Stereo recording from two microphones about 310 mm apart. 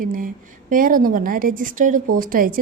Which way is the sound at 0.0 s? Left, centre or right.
Right.